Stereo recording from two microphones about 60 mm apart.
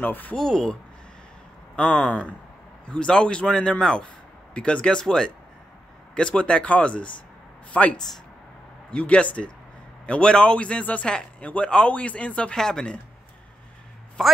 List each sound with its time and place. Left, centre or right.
0.0 s speech: left
0.4 s a man's voice: centre
1.8 s a man's voice: centre
14.2 s a man's voice: centre